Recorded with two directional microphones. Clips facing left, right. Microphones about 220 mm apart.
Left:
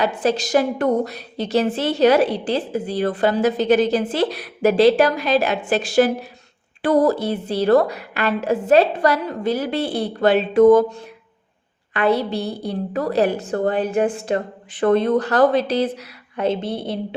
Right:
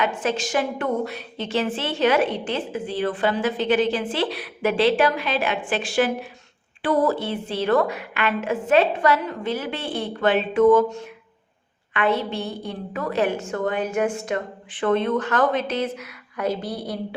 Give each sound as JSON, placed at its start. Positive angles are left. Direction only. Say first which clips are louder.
{"t": 0.0, "sound": "a woman's voice", "louder": "left 4 dB", "side_deg": 35}